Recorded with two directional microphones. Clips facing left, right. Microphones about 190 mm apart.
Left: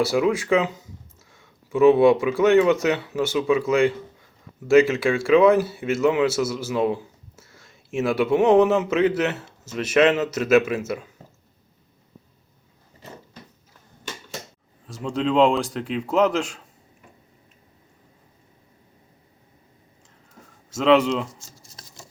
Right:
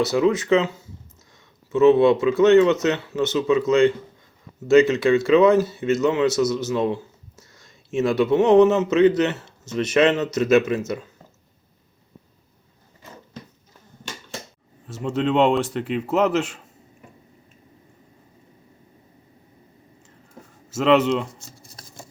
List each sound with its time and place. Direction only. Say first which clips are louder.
0.0 s speech: right 1 dB; 10° left (ahead or behind)
14.8 s speech: right 1 dB; 5° right (ahead or behind)
20.7 s speech: even; 5° right (ahead or behind)
21.3 s a sound: right 3 dB; 60° right (ahead or behind)